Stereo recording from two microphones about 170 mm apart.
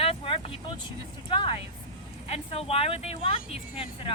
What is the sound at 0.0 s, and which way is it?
Vehicle, 35° left (ahead or behind).